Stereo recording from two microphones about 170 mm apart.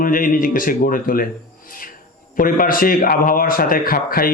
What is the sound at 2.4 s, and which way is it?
A man's voice, 55° left (ahead or behind).